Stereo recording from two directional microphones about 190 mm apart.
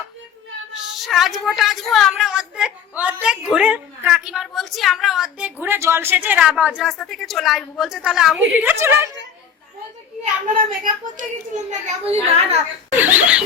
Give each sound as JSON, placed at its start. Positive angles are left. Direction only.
{"t": 0.9, "sound": "a woman's voice", "side_deg": 0}
{"t": 10.4, "sound": "a child's voice", "side_deg": -45}
{"t": 12.1, "sound": "a woman's voice", "side_deg": -35}
{"t": 13.0, "sound": "a woman's voice", "side_deg": -10}